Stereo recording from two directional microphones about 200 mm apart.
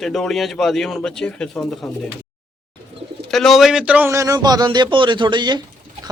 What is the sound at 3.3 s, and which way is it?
A man's voice, centre (ahead or behind).